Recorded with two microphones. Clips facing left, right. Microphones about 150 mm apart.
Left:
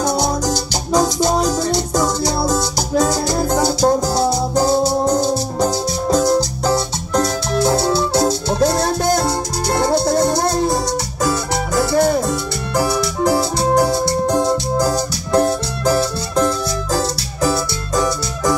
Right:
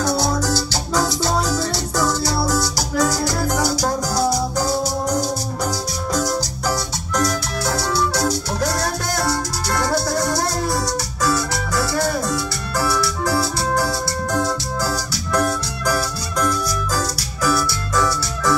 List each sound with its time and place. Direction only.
0.0 s music: 20° left (ahead or behind)
14.3 s organ: 20° left (ahead or behind)
15.3 s music: 25° left (ahead or behind)